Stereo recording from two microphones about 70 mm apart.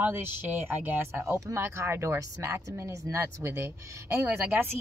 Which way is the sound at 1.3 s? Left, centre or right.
Right.